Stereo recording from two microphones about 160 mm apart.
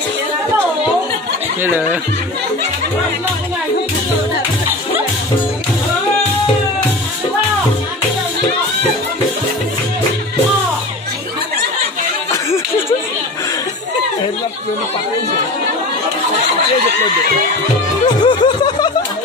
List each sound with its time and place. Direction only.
1.6 s speech: 10° right (ahead or behind)
18.0 s chuckle: 30° left (ahead or behind)